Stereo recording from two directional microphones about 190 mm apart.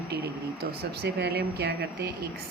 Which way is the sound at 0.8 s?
55° right (ahead or behind).